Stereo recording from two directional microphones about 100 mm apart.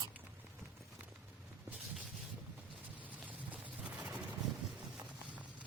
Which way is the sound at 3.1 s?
15° right (ahead or behind).